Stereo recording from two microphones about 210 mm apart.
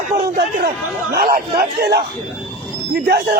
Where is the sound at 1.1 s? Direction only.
45° right (ahead or behind).